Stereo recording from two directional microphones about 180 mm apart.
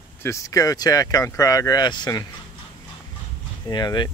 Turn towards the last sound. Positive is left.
turn(degrees=20)  # may be behind; listen again after turning